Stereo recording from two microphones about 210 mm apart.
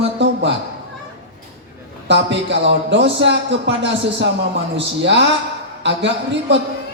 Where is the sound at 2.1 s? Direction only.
55° right (ahead or behind).